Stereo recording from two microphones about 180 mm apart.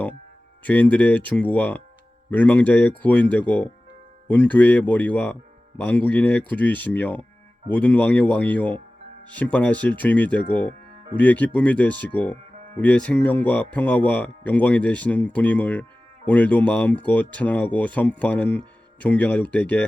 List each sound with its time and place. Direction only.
0.6 s speech: 10° left (ahead or behind)